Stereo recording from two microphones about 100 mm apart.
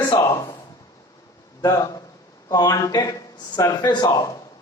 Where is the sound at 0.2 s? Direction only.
35° left (ahead or behind).